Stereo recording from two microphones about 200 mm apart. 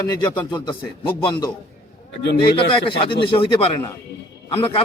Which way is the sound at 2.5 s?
25° left (ahead or behind).